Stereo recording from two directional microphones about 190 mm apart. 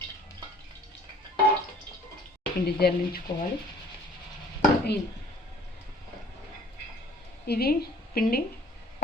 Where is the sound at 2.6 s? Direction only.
55° left (ahead or behind).